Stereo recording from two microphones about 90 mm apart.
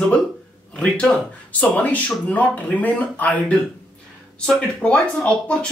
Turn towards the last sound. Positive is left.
turn(degrees=10)  # may be behind; listen again after turning